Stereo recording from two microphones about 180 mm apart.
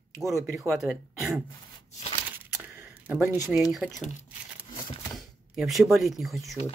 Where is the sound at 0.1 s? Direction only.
15° right (ahead or behind).